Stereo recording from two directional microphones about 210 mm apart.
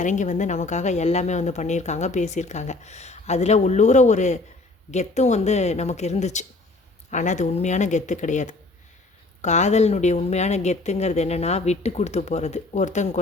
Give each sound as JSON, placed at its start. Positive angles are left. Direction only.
{"t": 0.0, "sound": "speech", "side_deg": 35}